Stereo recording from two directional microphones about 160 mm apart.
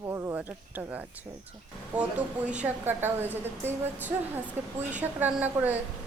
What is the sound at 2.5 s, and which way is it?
Speech, 10° right (ahead or behind).